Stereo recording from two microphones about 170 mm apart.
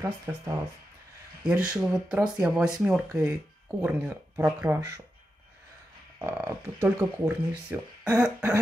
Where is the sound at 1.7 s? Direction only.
5° right (ahead or behind).